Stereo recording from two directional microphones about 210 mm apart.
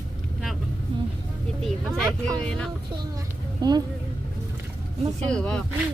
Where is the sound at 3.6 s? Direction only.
20° right (ahead or behind).